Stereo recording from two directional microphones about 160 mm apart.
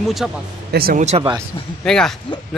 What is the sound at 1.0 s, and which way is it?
Speech, 45° right (ahead or behind).